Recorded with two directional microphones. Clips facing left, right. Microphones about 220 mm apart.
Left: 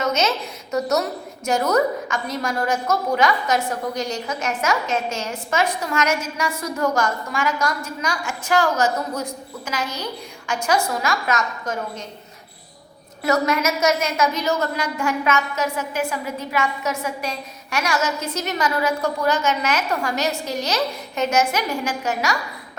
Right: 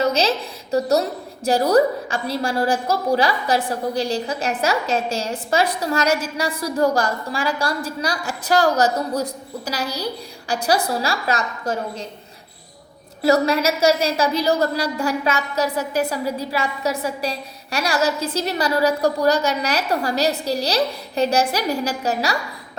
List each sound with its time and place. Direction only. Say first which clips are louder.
0.0 s a woman's voice: right 2 dB; 35° right (ahead or behind)
13.2 s a woman's voice: right 3 dB; 30° right (ahead or behind)